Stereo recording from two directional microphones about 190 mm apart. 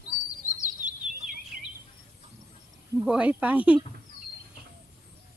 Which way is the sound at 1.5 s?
50° right (ahead or behind).